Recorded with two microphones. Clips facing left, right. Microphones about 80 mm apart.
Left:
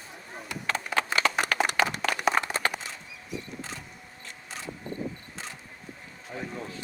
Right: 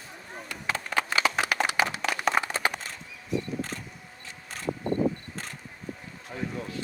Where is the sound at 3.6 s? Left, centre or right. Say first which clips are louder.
Right 5 dB; right.